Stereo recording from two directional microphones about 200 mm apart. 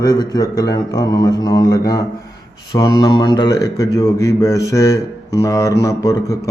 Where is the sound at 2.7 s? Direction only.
20° left (ahead or behind).